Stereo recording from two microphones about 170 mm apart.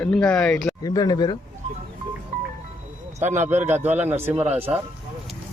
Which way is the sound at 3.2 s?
45° right (ahead or behind).